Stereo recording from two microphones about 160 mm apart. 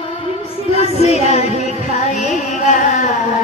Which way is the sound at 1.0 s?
40° left (ahead or behind).